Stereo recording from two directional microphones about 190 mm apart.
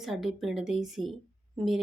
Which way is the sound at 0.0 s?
Centre (ahead or behind).